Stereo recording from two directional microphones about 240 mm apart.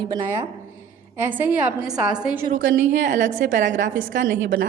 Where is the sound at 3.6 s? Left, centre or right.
Right.